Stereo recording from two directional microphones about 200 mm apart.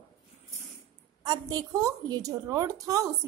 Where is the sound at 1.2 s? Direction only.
20° right (ahead or behind).